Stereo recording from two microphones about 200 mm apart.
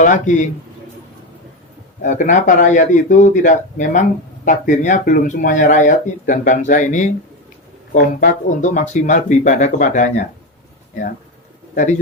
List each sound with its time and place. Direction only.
0.0 s a man's voice: 40° left (ahead or behind)
2.0 s speech: 40° left (ahead or behind)
11.7 s a man's voice: 40° left (ahead or behind)